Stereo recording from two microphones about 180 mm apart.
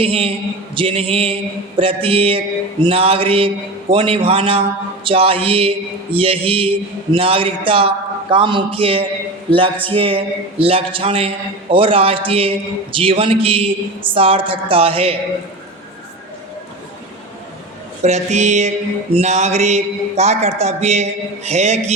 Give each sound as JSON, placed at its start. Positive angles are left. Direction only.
{"t": 0.0, "sound": "a man's voice", "side_deg": -30}
{"t": 18.0, "sound": "a man's voice", "side_deg": -40}